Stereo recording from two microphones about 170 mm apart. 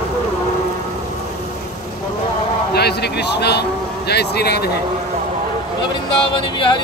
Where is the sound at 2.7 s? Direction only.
75° left (ahead or behind).